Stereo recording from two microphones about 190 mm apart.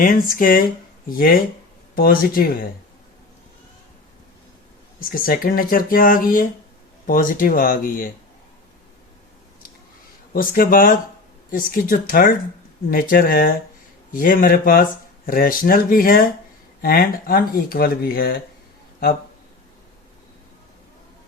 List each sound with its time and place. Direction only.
0.0 s speech: 50° left (ahead or behind)
4.9 s speech: 50° left (ahead or behind)
10.3 s speech: 50° left (ahead or behind)